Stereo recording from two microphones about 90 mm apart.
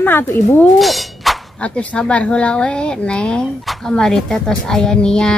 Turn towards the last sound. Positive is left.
turn(degrees=10)  # may be behind; listen again after turning